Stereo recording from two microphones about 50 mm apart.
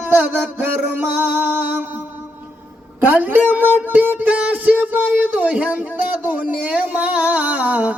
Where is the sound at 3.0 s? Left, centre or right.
Right.